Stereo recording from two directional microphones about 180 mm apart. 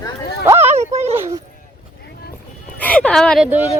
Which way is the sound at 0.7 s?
35° right (ahead or behind).